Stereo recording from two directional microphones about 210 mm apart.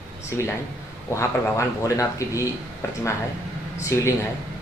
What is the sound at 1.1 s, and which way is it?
A man's voice, 15° left (ahead or behind).